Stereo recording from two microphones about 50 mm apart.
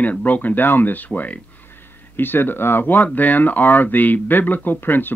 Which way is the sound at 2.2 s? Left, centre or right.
Left.